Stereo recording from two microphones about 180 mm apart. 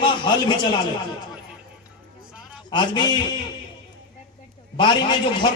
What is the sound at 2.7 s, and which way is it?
Speech, 25° left (ahead or behind).